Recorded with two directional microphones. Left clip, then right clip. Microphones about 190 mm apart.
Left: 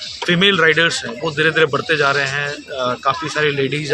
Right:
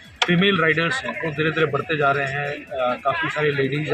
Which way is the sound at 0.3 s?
30° left (ahead or behind).